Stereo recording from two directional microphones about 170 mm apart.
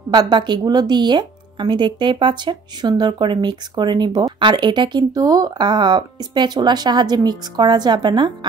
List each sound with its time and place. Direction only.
0.1 s a woman's voice: 25° right (ahead or behind)